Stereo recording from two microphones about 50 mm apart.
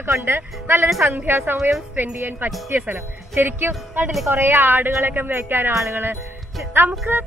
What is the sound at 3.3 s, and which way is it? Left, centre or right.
Speech, right.